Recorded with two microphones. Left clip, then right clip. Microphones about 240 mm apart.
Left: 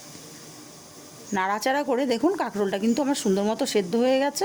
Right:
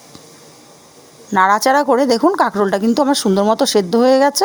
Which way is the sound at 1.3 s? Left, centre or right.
Right.